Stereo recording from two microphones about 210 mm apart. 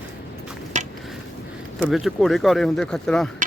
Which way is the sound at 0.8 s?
35° right (ahead or behind).